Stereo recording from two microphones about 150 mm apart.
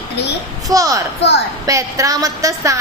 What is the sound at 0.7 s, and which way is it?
A woman's voice, 25° right (ahead or behind).